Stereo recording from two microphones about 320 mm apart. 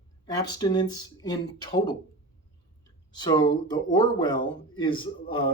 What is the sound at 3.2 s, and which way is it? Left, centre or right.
Speech, centre.